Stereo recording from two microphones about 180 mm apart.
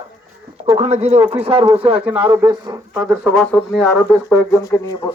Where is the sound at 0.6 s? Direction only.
35° right (ahead or behind).